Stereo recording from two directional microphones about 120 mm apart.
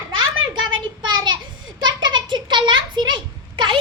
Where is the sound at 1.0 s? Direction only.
35° right (ahead or behind).